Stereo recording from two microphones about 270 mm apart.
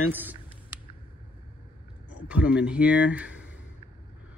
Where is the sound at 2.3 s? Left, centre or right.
Centre.